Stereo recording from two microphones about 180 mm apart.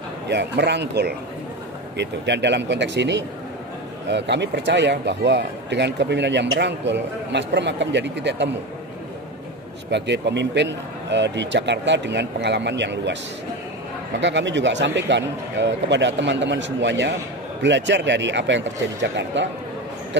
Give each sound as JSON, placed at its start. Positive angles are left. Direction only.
{"t": 0.3, "sound": "speech", "side_deg": -70}
{"t": 9.8, "sound": "speech", "side_deg": -75}
{"t": 14.2, "sound": "a man's voice", "side_deg": -85}